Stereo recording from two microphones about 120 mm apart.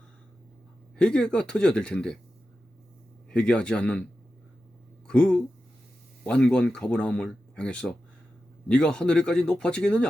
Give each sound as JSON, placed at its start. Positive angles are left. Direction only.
{"t": 0.9, "sound": "speech", "side_deg": 5}
{"t": 3.2, "sound": "speech", "side_deg": 10}
{"t": 5.0, "sound": "speech", "side_deg": 5}